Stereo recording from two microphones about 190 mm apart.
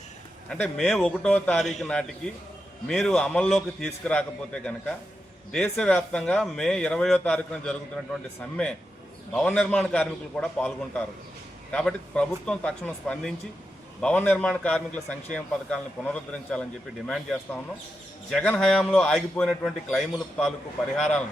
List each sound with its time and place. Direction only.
0.5 s speech: 5° left (ahead or behind)
18.3 s speech: 5° left (ahead or behind)